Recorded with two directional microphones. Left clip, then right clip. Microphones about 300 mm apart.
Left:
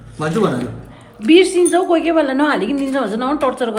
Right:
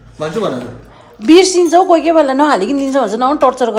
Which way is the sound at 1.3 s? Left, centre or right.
Centre.